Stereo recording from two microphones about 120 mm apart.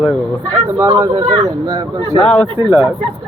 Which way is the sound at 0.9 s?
30° right (ahead or behind).